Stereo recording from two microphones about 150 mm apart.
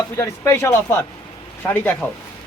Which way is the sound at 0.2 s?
15° left (ahead or behind).